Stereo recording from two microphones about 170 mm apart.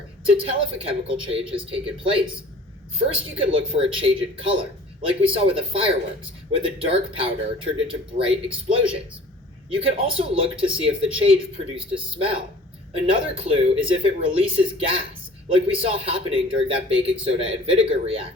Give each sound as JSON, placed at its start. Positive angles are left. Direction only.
{"t": 0.4, "sound": "speech", "side_deg": -30}
{"t": 12.9, "sound": "speech", "side_deg": -30}